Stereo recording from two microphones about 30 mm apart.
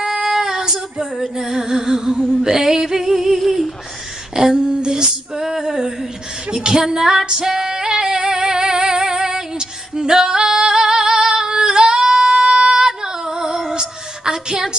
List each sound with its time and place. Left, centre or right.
0.0 s female singing: centre
1.1 s music: centre
3.3 s a sound: centre
4.4 s female singing: right
5.4 s music: centre
6.5 s female singing: right
8.2 s music: right
11.8 s singing: right
13.7 s a sound: right